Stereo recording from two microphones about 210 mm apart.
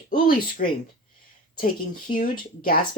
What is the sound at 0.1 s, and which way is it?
Speech, 40° left (ahead or behind).